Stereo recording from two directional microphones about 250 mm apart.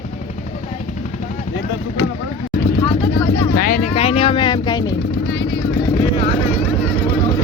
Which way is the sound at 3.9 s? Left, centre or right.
Left.